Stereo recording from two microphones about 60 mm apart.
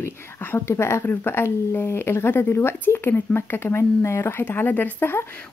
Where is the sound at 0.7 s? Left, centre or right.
Left.